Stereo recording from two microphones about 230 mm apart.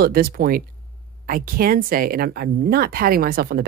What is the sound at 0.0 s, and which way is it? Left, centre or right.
Speech, right.